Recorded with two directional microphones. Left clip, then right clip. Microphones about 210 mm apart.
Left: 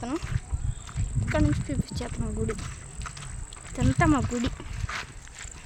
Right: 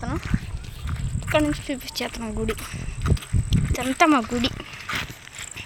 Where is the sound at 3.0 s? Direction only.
50° right (ahead or behind).